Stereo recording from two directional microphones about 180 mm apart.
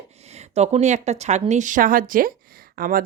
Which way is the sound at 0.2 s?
35° right (ahead or behind).